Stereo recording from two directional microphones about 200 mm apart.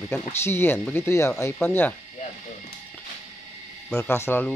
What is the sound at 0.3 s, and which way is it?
Speech, 10° left (ahead or behind).